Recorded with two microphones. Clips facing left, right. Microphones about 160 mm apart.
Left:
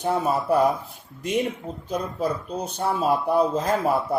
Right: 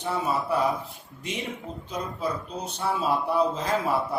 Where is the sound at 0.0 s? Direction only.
45° left (ahead or behind).